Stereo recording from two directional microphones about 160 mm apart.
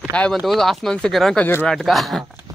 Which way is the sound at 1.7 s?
Centre (ahead or behind).